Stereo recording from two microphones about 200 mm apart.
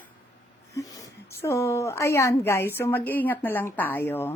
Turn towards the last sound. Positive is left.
turn(degrees=10)  # may be behind; listen again after turning